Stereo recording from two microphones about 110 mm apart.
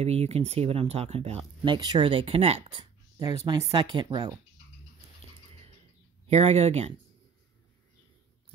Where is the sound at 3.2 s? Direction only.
40° right (ahead or behind).